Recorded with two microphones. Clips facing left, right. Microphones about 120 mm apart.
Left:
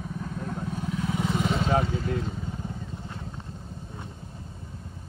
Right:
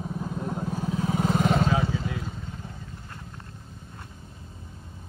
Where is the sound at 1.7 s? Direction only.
50° left (ahead or behind).